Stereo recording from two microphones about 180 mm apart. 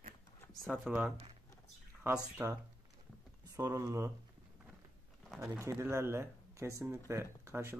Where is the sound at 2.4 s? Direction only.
15° right (ahead or behind).